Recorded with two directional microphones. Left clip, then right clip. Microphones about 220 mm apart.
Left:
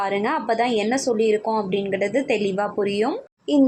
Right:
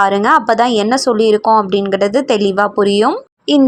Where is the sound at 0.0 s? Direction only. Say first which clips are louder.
Right 12 dB; 20° right (ahead or behind).